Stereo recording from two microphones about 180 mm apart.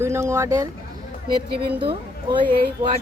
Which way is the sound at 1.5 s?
60° right (ahead or behind).